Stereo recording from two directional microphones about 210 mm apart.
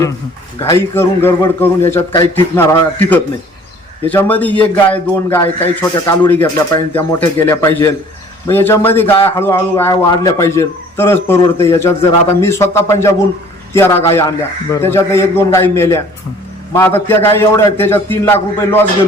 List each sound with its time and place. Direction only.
0.6 s a man's voice: 10° left (ahead or behind)